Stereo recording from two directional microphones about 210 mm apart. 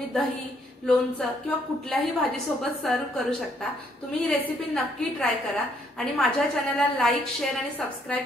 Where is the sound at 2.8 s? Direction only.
5° left (ahead or behind).